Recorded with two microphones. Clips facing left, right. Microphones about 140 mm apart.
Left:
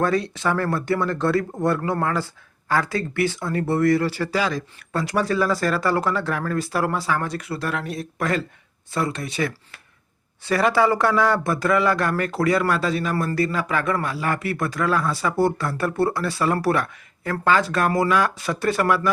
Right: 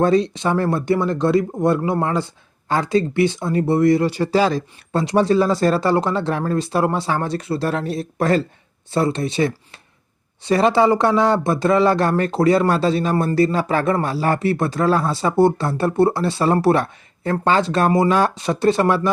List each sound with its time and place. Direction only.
0.0 s speech: 20° right (ahead or behind)